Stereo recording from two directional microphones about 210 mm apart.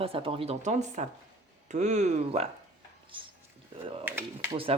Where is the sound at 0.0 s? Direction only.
25° right (ahead or behind).